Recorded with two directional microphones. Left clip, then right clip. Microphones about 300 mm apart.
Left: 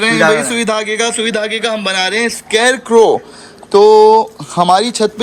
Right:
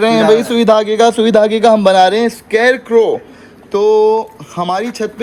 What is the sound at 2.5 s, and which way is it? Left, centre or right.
A man's voice, centre.